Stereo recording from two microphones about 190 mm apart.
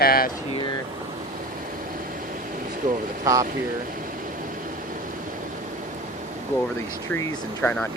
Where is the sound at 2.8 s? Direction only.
45° right (ahead or behind).